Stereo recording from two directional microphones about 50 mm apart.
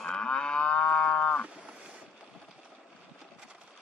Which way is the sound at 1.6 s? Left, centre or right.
Right.